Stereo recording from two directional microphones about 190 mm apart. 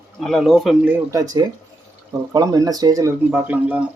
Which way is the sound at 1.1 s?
20° right (ahead or behind).